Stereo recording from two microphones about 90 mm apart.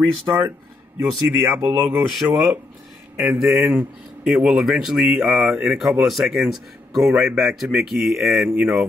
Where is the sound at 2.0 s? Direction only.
5° right (ahead or behind).